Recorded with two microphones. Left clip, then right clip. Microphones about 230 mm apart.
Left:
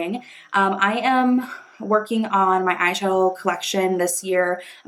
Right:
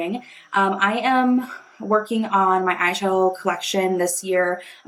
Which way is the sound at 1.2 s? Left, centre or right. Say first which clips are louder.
Even; left.